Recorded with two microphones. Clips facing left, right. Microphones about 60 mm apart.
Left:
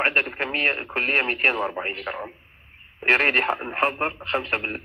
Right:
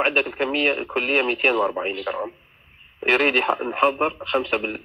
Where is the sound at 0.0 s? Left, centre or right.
Left.